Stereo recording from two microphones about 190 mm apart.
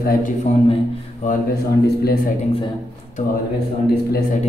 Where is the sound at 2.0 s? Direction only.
50° left (ahead or behind).